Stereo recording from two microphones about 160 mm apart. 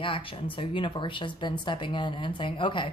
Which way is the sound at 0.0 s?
35° left (ahead or behind).